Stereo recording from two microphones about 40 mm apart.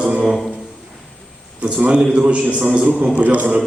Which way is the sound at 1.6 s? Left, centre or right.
Right.